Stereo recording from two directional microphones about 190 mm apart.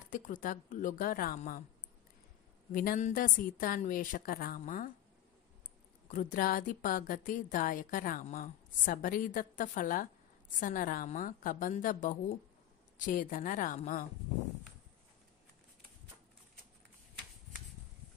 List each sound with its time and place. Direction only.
0.1 s a woman's voice: 45° left (ahead or behind)
2.7 s a woman's voice: 45° left (ahead or behind)
6.0 s a woman's voice: 40° left (ahead or behind)